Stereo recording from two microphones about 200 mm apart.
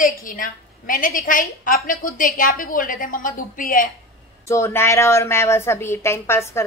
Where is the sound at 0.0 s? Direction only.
40° left (ahead or behind).